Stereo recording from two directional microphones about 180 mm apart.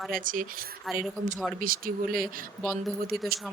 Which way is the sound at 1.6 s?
50° right (ahead or behind).